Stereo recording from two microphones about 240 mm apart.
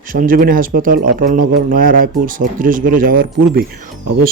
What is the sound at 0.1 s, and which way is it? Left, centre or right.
Speech, right.